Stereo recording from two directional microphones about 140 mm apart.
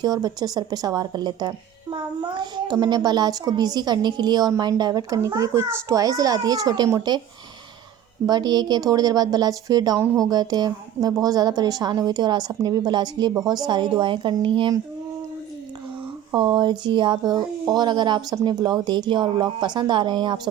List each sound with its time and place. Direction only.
0.0 s a woman's voice: 30° right (ahead or behind)
8.3 s a woman's voice: 30° right (ahead or behind)
16.3 s speech: 35° right (ahead or behind)